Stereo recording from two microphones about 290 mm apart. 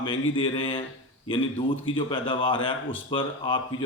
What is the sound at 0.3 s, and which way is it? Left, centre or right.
Speech, centre.